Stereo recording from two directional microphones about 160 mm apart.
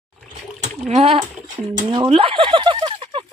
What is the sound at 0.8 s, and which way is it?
Speech, 40° right (ahead or behind).